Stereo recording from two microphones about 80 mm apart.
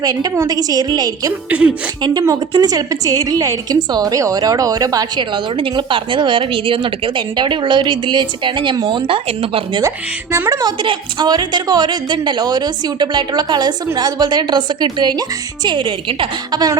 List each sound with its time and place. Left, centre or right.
0.0 s a woman's voice: right
1.5 s a woman's voice: centre
2.0 s a woman's voice: right
2.5 s a woman's voice: right
5.3 s a woman's voice: right
10.6 s a woman's voice: right
15.6 s a woman's voice: right